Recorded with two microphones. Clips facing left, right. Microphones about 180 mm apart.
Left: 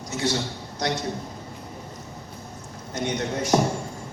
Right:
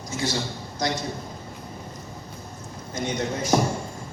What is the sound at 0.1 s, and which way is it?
Speech, 65° left (ahead or behind).